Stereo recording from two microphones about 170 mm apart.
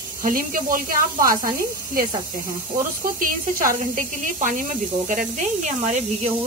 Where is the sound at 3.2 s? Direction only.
55° right (ahead or behind).